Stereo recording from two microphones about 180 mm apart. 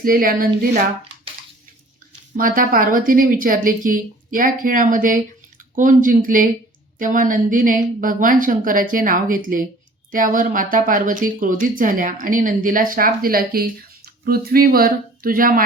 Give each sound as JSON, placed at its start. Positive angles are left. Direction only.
{"t": 0.0, "sound": "speech", "side_deg": -50}
{"t": 2.3, "sound": "speech", "side_deg": -50}